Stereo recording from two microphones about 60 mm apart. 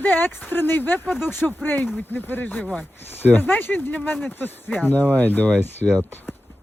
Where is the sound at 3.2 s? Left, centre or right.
Left.